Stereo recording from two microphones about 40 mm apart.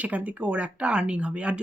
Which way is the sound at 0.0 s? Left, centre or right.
Right.